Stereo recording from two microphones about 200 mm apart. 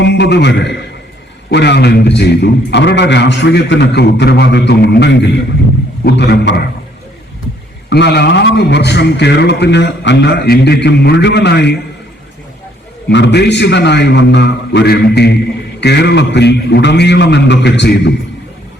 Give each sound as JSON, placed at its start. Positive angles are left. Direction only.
{"t": 0.0, "sound": "a man's voice", "side_deg": 60}
{"t": 7.9, "sound": "a man's voice", "side_deg": 60}
{"t": 13.1, "sound": "a man's voice", "side_deg": 60}